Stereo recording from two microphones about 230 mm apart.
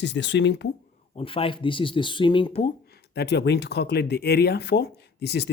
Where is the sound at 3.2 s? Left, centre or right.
Left.